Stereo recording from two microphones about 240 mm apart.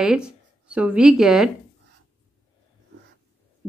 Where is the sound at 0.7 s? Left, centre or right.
Centre.